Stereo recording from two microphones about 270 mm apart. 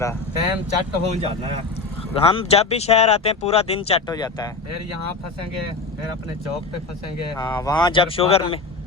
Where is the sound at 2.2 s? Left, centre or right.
Left.